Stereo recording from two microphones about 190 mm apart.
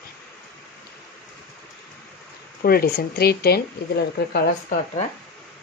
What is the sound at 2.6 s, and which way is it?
A woman's voice, 55° left (ahead or behind).